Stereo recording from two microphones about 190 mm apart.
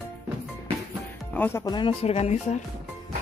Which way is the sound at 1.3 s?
15° left (ahead or behind).